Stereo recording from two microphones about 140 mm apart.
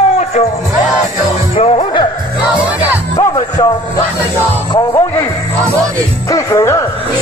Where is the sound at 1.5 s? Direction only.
45° left (ahead or behind).